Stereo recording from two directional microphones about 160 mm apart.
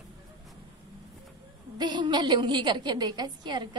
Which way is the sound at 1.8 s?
30° right (ahead or behind).